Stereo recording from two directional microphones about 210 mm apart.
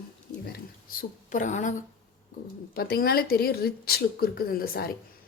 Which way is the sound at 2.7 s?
45° left (ahead or behind).